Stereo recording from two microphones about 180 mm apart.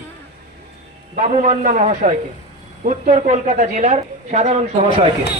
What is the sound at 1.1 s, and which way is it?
A woman's voice, 40° right (ahead or behind).